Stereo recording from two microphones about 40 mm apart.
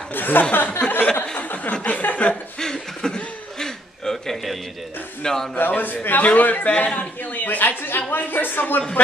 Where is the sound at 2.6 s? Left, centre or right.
Centre.